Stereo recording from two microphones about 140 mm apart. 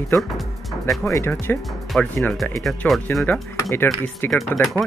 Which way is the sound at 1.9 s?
5° left (ahead or behind).